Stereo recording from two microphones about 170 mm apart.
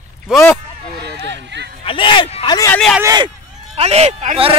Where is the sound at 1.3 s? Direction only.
90° right.